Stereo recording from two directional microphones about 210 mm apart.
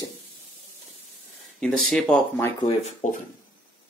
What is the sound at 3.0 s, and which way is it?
Speech, 35° left (ahead or behind).